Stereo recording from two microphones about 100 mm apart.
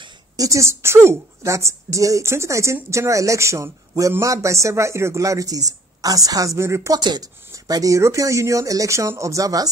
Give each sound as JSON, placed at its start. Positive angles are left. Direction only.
{"t": 0.4, "sound": "a woman's voice", "side_deg": -30}
{"t": 7.0, "sound": "speech", "side_deg": -50}
{"t": 7.5, "sound": "speech", "side_deg": -35}